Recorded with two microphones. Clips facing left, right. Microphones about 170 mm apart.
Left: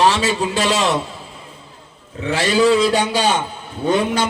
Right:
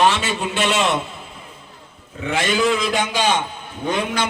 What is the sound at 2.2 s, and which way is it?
A man's voice, 35° left (ahead or behind).